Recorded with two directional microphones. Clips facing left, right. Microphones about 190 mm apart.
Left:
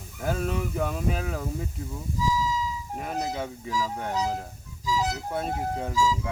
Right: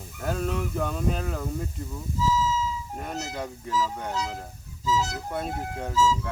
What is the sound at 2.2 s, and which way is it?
Music, 15° left (ahead or behind).